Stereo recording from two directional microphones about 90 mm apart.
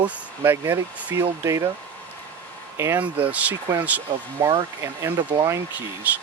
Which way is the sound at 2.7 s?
25° right (ahead or behind).